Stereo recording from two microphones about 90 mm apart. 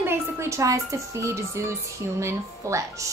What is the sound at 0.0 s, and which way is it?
A woman's voice, 30° right (ahead or behind).